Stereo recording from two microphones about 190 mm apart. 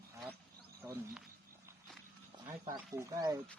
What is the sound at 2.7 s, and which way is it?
Speech, 15° right (ahead or behind).